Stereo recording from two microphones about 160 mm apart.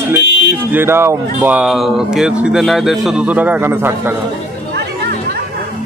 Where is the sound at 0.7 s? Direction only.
15° right (ahead or behind).